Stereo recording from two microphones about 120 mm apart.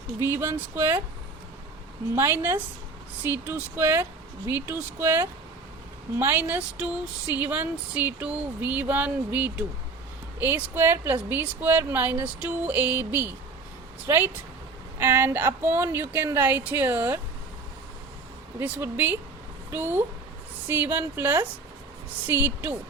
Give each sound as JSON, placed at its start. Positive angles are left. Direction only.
{"t": 0.3, "sound": "a woman's voice", "side_deg": -20}
{"t": 2.1, "sound": "a woman's voice", "side_deg": -20}
{"t": 18.6, "sound": "speech", "side_deg": -15}